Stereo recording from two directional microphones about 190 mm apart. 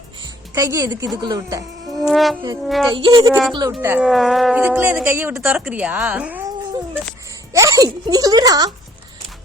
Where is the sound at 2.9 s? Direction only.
25° right (ahead or behind).